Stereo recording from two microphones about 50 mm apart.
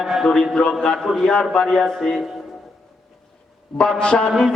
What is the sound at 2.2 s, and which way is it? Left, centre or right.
Speech, centre.